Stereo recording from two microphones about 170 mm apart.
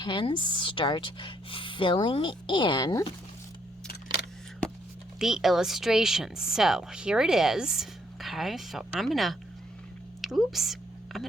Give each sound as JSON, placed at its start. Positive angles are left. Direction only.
{"t": 0.0, "sound": "a woman's voice", "side_deg": 30}
{"t": 5.2, "sound": "speech", "side_deg": 0}
{"t": 10.2, "sound": "a sound", "side_deg": 0}